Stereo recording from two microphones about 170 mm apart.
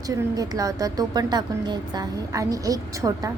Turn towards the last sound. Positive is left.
turn(degrees=-20)  # may be behind; listen again after turning